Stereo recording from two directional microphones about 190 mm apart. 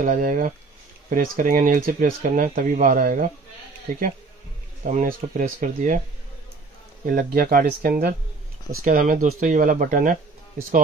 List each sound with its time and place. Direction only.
0.0 s speech: 40° right (ahead or behind)
4.8 s speech: 45° right (ahead or behind)
7.1 s speech: 50° right (ahead or behind)